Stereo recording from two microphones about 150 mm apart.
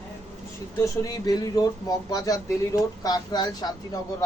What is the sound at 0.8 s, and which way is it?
Speech, 25° left (ahead or behind).